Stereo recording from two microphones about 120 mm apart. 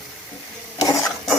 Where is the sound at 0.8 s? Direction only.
30° left (ahead or behind).